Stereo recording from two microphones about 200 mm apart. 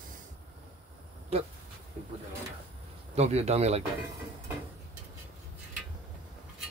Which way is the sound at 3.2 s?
35° right (ahead or behind).